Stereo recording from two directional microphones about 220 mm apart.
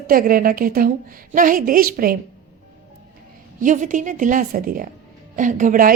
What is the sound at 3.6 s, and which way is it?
A woman's voice, 35° right (ahead or behind).